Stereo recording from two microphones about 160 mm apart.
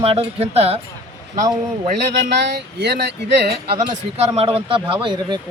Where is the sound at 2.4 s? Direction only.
90° right.